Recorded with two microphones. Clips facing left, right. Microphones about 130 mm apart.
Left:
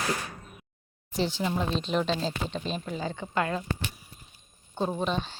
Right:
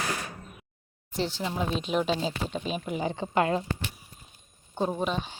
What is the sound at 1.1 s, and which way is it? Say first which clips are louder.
A woman's voice: left 2 dB; centre (ahead or behind).